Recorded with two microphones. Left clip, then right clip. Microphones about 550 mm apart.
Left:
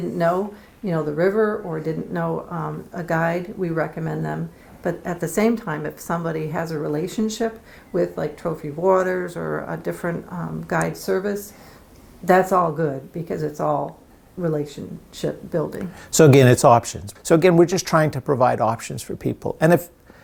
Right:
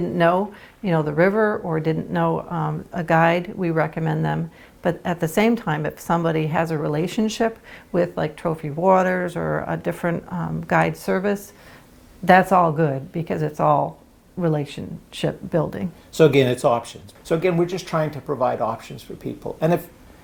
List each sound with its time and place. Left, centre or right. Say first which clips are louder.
0.9 s speech: right 2 dB; right
16.1 s speech: left 3 dB; left